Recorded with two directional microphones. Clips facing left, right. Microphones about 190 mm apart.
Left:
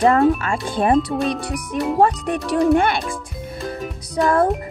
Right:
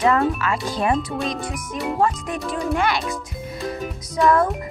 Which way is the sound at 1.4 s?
70° left (ahead or behind).